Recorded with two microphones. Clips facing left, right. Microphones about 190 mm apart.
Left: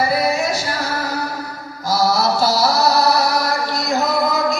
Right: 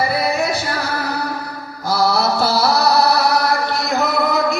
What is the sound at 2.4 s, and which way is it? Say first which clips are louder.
Music: even; 60° right (ahead or behind).